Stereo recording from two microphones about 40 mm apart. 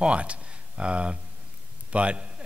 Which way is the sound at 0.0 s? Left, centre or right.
Right.